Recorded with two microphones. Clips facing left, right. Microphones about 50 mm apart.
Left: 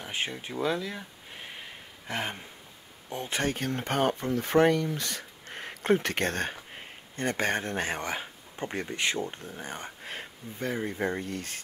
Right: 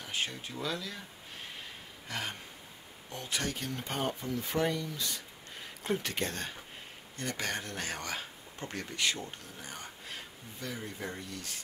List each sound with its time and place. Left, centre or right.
0.0 s a sound: left
3.1 s speech: left
7.2 s speech: left